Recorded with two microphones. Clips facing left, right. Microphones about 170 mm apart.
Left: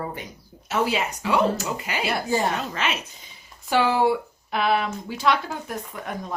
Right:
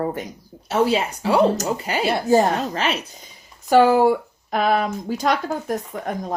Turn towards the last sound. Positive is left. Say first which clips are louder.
# right 5 dB
turn(degrees=-45)  # may be behind; listen again after turning